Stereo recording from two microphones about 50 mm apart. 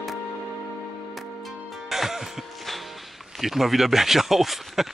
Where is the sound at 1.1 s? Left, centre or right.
Centre.